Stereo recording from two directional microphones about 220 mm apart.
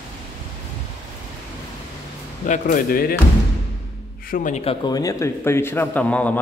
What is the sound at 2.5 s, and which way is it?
Speech, 40° left (ahead or behind).